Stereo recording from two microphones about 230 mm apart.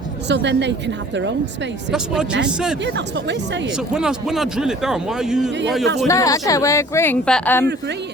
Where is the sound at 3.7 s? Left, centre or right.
Centre.